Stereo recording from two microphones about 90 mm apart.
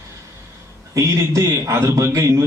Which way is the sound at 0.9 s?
35° right (ahead or behind).